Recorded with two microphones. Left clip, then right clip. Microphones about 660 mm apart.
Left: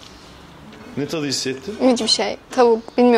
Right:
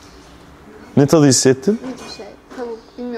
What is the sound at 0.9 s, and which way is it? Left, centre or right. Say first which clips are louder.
Speech: right 11 dB; right.